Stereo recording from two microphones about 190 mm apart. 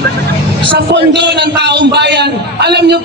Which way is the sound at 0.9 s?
65° right (ahead or behind).